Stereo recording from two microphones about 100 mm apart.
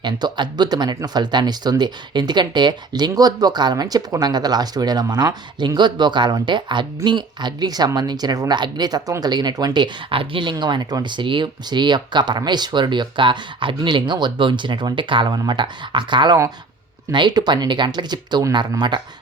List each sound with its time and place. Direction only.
0.0 s speech: 45° right (ahead or behind)
10.5 s speech: 45° right (ahead or behind)